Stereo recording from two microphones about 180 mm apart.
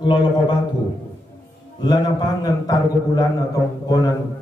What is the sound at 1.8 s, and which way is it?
A man's voice, 20° left (ahead or behind).